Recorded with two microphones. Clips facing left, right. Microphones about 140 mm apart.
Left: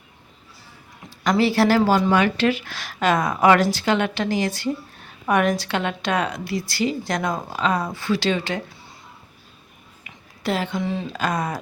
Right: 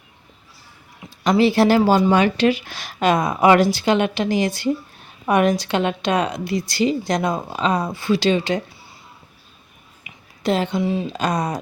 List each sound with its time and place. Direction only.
1.2 s a woman's voice: 20° right (ahead or behind)
10.0 s speech: 20° right (ahead or behind)